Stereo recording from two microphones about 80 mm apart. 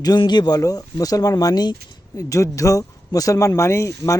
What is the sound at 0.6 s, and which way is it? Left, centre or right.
Speech, left.